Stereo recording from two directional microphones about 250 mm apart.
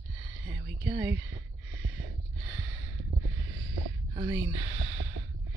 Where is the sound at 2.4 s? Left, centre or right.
Centre.